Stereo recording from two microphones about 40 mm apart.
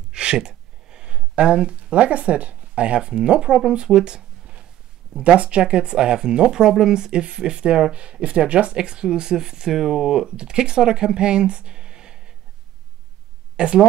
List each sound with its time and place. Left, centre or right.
0.1 s speech: right
4.0 s a sound: right
5.1 s speech: right; by 10.0 s centre
10.0 s speech: centre
13.6 s speech: right